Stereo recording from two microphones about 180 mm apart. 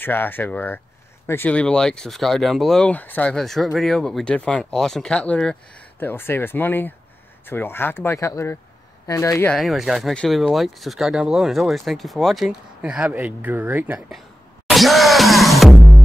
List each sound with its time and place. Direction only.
0.0 s speech: 10° left (ahead or behind)
9.5 s speech: centre (ahead or behind)
14.7 s music: centre (ahead or behind)